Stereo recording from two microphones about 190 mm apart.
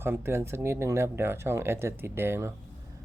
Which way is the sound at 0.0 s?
10° right (ahead or behind).